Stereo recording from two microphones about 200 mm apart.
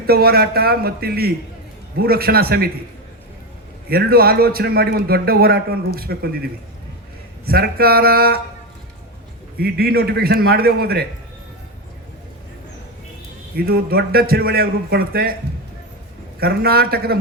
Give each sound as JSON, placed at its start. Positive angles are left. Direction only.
{"t": 0.1, "sound": "a man's voice", "side_deg": -50}
{"t": 3.8, "sound": "a man's voice", "side_deg": -50}
{"t": 7.4, "sound": "a man's voice", "side_deg": -50}
{"t": 9.6, "sound": "a man's voice", "side_deg": -50}
{"t": 13.7, "sound": "a man's voice", "side_deg": -50}
{"t": 16.4, "sound": "a man's voice", "side_deg": -50}